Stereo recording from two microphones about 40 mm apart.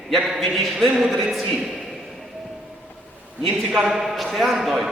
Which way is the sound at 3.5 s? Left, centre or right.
Right.